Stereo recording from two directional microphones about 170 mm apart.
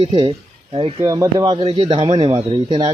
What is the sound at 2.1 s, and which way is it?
Speech, 25° right (ahead or behind).